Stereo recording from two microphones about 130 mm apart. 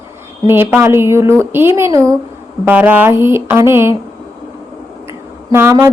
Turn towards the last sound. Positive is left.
turn(degrees=-20)  # may be behind; listen again after turning